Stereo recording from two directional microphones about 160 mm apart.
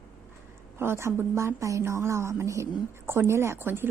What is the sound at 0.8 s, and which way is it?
A woman's voice, 15° right (ahead or behind).